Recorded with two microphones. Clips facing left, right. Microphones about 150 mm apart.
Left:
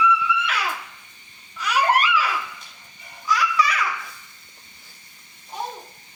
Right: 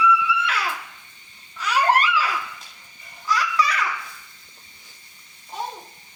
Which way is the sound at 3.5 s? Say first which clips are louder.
Left 1 dB; 10° left (ahead or behind).